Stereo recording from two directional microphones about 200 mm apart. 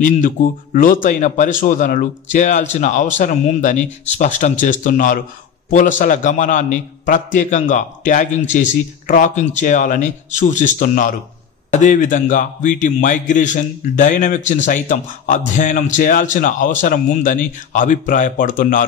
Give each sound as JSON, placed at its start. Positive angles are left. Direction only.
{"t": 0.0, "sound": "a man's voice", "side_deg": 40}